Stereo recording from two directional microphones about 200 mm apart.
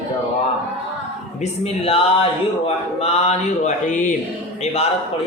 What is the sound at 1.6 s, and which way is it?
Speech, 30° left (ahead or behind).